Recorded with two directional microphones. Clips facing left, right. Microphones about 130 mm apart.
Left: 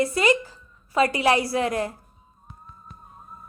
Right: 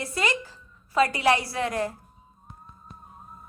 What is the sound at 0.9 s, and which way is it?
Speech, 15° left (ahead or behind).